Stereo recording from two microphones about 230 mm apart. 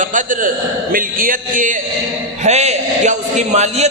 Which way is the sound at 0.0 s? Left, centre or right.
Right.